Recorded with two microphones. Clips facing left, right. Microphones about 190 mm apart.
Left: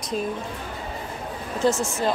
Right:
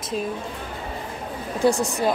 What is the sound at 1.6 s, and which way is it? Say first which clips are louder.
Speech: right 2 dB; 15° right (ahead or behind).